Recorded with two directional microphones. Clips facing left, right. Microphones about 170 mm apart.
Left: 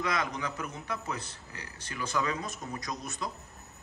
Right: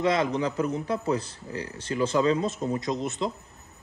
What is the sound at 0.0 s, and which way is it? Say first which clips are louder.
Speech: right 8 dB; 25° right (ahead or behind).